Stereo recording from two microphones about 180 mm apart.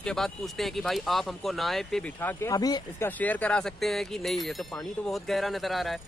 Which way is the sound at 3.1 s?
10° left (ahead or behind).